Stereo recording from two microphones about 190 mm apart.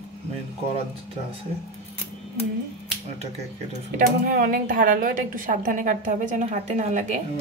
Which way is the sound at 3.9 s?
45° right (ahead or behind).